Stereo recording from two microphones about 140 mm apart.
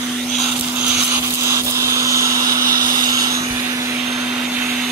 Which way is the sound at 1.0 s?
20° right (ahead or behind).